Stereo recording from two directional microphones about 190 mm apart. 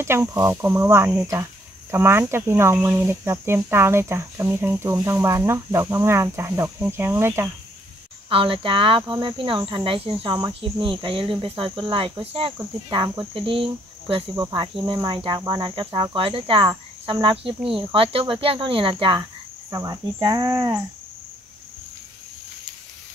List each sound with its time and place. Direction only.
0.0 s speech: 15° right (ahead or behind)
8.3 s speech: 30° right (ahead or behind)